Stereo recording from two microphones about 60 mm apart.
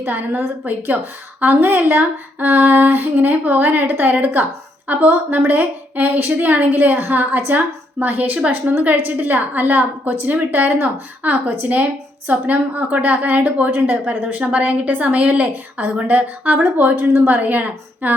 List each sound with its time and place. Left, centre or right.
0.0 s female singing: right
1.6 s female singing: right
4.9 s a woman's voice: right
17.1 s female singing: right